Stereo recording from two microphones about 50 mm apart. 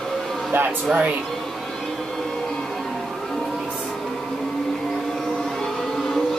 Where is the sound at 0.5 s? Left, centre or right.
Right.